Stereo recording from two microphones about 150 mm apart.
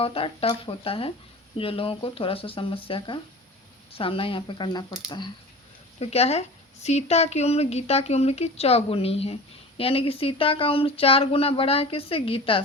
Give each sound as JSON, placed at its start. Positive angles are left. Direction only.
{"t": 0.0, "sound": "speech", "side_deg": 40}
{"t": 6.0, "sound": "speech", "side_deg": 45}